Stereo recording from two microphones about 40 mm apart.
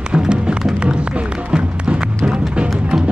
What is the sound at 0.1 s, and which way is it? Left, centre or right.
Music, right.